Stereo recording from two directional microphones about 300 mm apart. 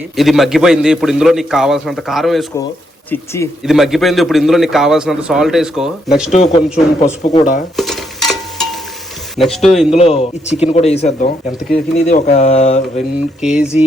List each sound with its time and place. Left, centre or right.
0.2 s a man's voice: centre
3.6 s a man's voice: centre
6.3 s speech: left
7.8 s a sound: centre
9.3 s a man's voice: centre
9.9 s speech: left
13.4 s a man's voice: centre